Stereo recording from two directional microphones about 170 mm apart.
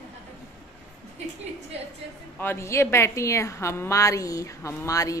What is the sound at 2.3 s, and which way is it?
A woman's voice, 15° left (ahead or behind).